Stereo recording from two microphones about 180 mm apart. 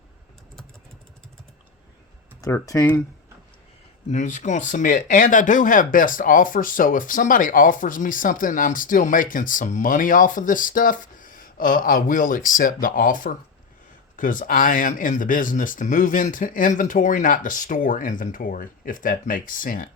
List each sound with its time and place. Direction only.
2.4 s speech: 15° left (ahead or behind)
4.1 s speech: 40° left (ahead or behind)